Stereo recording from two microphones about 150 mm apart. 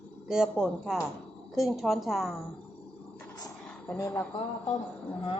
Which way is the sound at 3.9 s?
15° left (ahead or behind).